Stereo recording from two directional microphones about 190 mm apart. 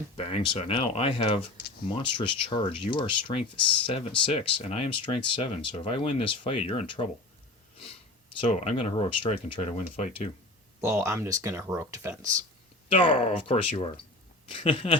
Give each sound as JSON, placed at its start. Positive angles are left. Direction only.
{"t": 0.2, "sound": "speech", "side_deg": 30}
{"t": 8.4, "sound": "speech", "side_deg": 30}
{"t": 10.8, "sound": "speech", "side_deg": -15}
{"t": 12.9, "sound": "speech", "side_deg": 30}